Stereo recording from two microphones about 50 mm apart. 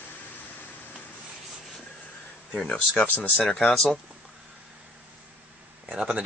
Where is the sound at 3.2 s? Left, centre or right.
Left.